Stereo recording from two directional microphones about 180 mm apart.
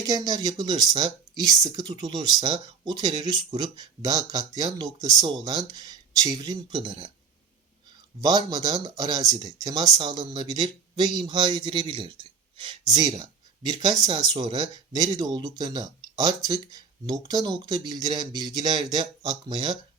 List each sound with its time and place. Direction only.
0.0 s speech: 20° right (ahead or behind)
8.2 s speech: 20° right (ahead or behind)